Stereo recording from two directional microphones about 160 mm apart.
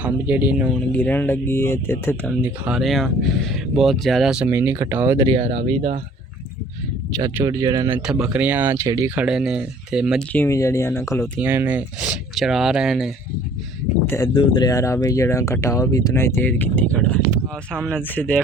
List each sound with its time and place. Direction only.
0.0 s speech: 10° right (ahead or behind)
0.7 s speech: 5° left (ahead or behind)
2.4 s speech: 5° right (ahead or behind)
5.2 s speech: 35° right (ahead or behind)
7.3 s speech: 20° right (ahead or behind)
7.9 s speech: 5° right (ahead or behind)
10.3 s speech: 15° left (ahead or behind)
11.3 s speech: 10° right (ahead or behind)
14.3 s speech: 30° left (ahead or behind); by 18.4 s 10° left (ahead or behind)